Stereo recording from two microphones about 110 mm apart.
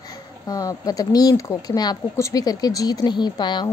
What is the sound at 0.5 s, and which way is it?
A woman's voice, 35° left (ahead or behind).